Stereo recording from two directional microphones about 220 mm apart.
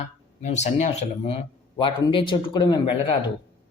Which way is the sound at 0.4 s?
30° left (ahead or behind).